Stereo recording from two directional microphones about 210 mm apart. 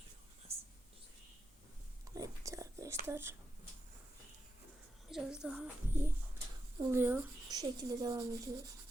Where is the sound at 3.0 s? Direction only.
10° right (ahead or behind).